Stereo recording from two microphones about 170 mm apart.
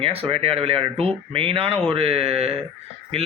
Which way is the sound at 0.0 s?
35° right (ahead or behind).